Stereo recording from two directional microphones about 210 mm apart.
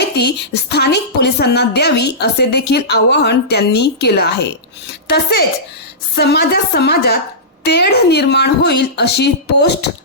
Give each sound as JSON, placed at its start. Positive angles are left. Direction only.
{"t": 0.2, "sound": "a woman's voice", "side_deg": 55}